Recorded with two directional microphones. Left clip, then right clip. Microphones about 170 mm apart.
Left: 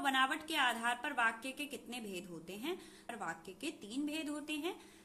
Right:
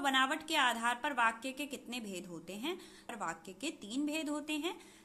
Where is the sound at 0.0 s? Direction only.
25° right (ahead or behind).